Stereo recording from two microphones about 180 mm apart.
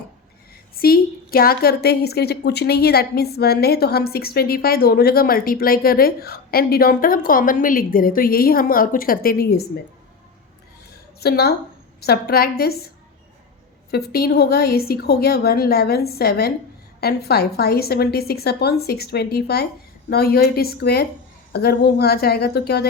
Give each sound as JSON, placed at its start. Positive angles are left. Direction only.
{"t": 0.8, "sound": "a woman's voice", "side_deg": 55}
{"t": 11.2, "sound": "a woman's voice", "side_deg": 60}
{"t": 13.9, "sound": "a woman's voice", "side_deg": 60}